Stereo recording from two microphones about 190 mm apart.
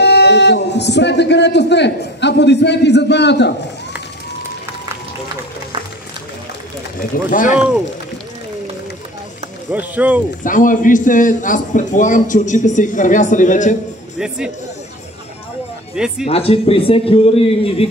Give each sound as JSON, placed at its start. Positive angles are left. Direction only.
{"t": 0.0, "sound": "speech", "side_deg": 60}
{"t": 7.0, "sound": "a man's voice", "side_deg": 45}
{"t": 9.7, "sound": "speech", "side_deg": -10}
{"t": 10.4, "sound": "a man's voice", "side_deg": 45}
{"t": 14.1, "sound": "speech", "side_deg": -5}
{"t": 15.9, "sound": "speech", "side_deg": -5}
{"t": 16.3, "sound": "a man's voice", "side_deg": 30}